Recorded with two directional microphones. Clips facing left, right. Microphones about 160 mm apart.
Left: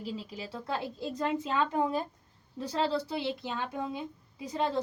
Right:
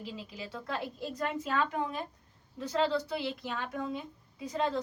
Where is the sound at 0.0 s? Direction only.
35° left (ahead or behind).